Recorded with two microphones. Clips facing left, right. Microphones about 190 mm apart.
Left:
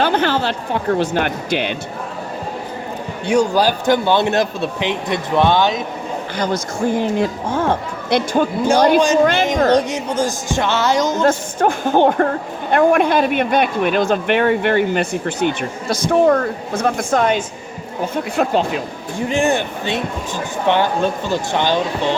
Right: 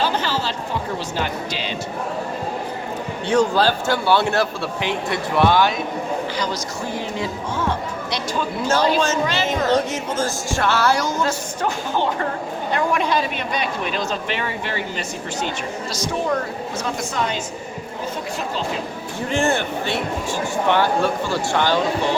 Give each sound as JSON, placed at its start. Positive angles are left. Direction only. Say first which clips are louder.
{"t": 0.0, "sound": "speech", "louder": "left 5 dB", "side_deg": 60}
{"t": 3.2, "sound": "a man's voice", "louder": "left 2 dB", "side_deg": 15}
{"t": 6.3, "sound": "speech", "louder": "left 4 dB", "side_deg": 50}
{"t": 9.6, "sound": "speech", "louder": "left 4 dB", "side_deg": 15}
{"t": 11.2, "sound": "speech", "louder": "left 7 dB", "side_deg": 55}
{"t": 19.3, "sound": "speech", "louder": "left 2 dB", "side_deg": 15}